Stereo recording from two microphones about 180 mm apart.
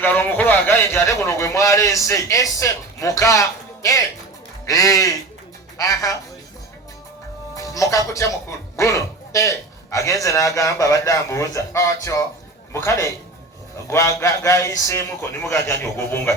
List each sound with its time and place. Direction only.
0.0 s speech: 10° left (ahead or behind)
3.8 s music: 15° left (ahead or behind)
4.6 s speech: 20° left (ahead or behind)
5.7 s music: 20° left (ahead or behind)
7.5 s speech: 20° left (ahead or behind)